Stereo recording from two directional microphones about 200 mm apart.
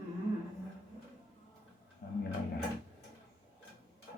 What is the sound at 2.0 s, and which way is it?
Drawer open or close, 50° left (ahead or behind).